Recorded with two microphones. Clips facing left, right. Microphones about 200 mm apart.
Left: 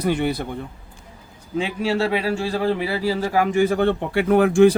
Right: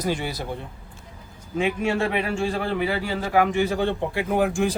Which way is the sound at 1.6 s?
30° left (ahead or behind).